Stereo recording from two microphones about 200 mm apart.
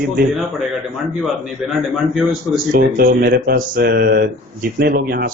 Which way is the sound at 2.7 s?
50° right (ahead or behind).